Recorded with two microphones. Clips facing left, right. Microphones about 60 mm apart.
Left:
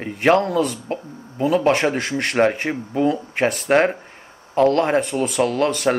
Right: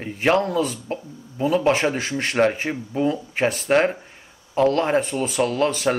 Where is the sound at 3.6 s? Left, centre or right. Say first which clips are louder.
Left 2 dB; left.